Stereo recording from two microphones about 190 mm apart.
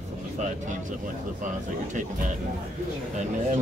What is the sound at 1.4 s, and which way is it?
Speech, 40° right (ahead or behind).